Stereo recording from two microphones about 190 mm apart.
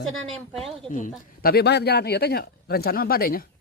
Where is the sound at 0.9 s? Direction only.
45° left (ahead or behind).